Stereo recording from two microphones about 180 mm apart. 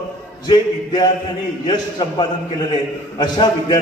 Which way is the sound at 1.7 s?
25° left (ahead or behind).